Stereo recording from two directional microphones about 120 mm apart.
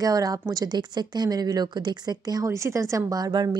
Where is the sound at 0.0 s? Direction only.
30° right (ahead or behind).